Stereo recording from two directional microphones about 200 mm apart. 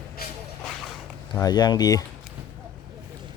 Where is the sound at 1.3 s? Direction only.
20° left (ahead or behind).